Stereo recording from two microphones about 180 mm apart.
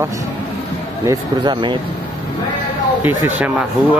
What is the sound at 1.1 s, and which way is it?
Speech, 25° right (ahead or behind).